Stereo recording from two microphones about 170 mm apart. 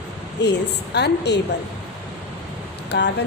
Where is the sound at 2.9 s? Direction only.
90° left.